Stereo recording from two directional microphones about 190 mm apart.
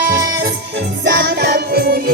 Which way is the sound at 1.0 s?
60° right (ahead or behind).